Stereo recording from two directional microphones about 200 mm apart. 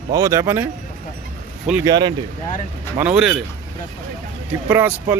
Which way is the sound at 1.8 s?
20° right (ahead or behind).